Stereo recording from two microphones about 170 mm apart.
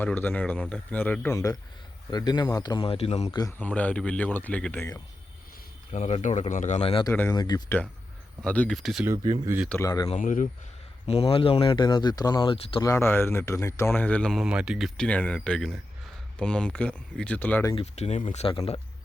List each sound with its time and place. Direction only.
0.0 s speech: 10° left (ahead or behind); by 3.3 s 40° left (ahead or behind)
3.6 s speech: 10° left (ahead or behind)
5.9 s speech: 40° left (ahead or behind)
7.0 s speech: 15° left (ahead or behind)
7.3 s speech: 25° left (ahead or behind)
8.4 s speech: 5° left (ahead or behind)
9.6 s speech: 15° left (ahead or behind)
10.2 s speech: 50° left (ahead or behind)
11.0 s speech: 35° left (ahead or behind)
12.8 s speech: 15° left (ahead or behind)
17.7 s speech: 40° left (ahead or behind)